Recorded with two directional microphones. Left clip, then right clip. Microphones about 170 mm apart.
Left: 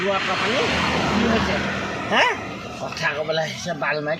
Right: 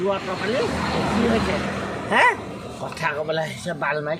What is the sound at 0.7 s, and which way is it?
Speech, 45° left (ahead or behind).